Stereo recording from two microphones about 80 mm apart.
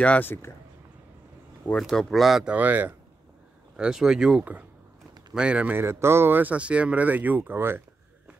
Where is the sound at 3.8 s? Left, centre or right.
Centre; by 7.8 s right.